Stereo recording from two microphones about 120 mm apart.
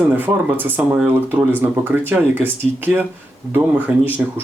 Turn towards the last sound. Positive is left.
turn(degrees=-15)  # may be behind; listen again after turning